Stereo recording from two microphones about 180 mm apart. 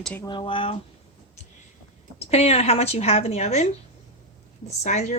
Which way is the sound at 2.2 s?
35° left (ahead or behind).